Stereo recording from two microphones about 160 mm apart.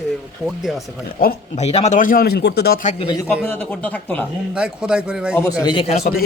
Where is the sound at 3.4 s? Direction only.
10° left (ahead or behind).